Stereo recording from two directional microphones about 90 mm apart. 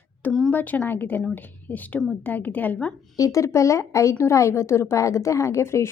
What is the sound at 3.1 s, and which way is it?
Speech, 40° left (ahead or behind).